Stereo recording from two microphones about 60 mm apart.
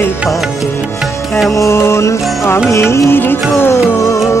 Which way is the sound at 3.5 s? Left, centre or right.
Left.